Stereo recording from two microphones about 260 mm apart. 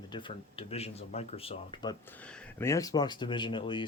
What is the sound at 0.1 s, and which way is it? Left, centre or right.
Speech, centre.